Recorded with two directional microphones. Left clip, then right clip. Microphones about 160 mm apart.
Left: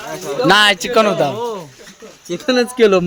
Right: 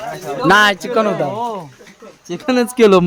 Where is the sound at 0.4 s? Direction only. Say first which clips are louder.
Even; 15° right (ahead or behind).